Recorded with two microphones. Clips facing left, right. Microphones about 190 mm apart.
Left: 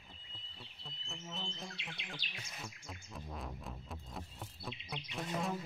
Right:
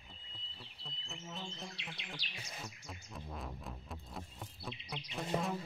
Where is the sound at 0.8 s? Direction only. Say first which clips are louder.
Even; centre (ahead or behind).